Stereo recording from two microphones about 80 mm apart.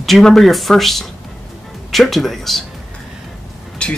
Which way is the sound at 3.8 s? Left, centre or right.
Centre.